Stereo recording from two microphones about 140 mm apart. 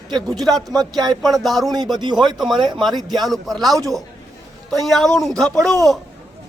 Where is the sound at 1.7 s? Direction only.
30° right (ahead or behind).